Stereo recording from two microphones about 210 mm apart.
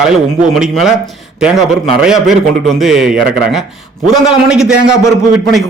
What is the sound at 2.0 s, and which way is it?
A man's voice, centre (ahead or behind).